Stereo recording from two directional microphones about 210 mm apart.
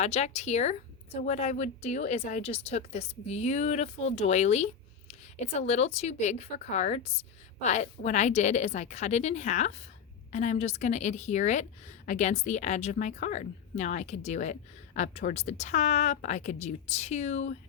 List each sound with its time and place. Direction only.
0.0 s speech: 30° left (ahead or behind)